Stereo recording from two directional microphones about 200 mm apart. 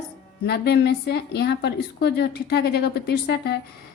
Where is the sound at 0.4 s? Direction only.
55° left (ahead or behind).